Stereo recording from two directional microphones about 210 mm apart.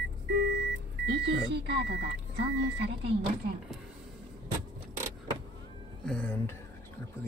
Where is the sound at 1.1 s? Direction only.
50° right (ahead or behind).